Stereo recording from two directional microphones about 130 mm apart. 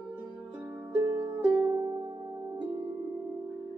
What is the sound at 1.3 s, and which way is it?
Music, 40° right (ahead or behind).